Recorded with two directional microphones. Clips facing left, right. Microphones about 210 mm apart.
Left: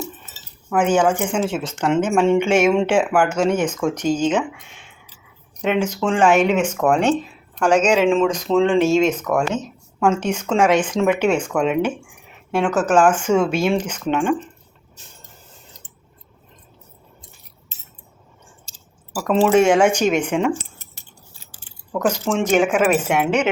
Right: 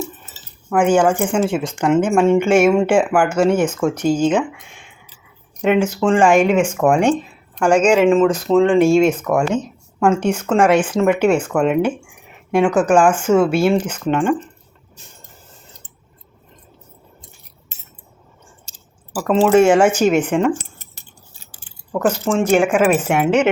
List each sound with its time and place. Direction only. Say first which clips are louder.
0.7 s speech: right 3 dB; 10° right (ahead or behind)
17.7 s scissors: right 2 dB; 55° right (ahead or behind)
18.7 s a sound: right 1 dB; 55° right (ahead or behind)
19.1 s speech: right 2 dB; centre (ahead or behind)
20.6 s keys jangling: even; 55° right (ahead or behind)
21.9 s speech: right 3 dB; 5° right (ahead or behind)